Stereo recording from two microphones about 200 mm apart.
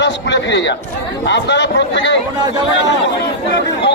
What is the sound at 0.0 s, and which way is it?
A man's voice, 60° left (ahead or behind).